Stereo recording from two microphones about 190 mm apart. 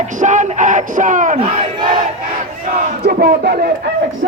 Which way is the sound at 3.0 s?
50° right (ahead or behind).